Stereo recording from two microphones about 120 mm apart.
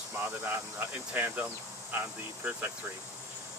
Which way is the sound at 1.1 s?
15° right (ahead or behind).